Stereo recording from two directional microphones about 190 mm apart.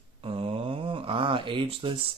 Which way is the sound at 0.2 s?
30° right (ahead or behind).